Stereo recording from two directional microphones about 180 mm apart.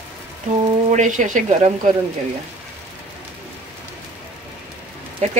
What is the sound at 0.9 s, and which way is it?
Speech, 45° right (ahead or behind).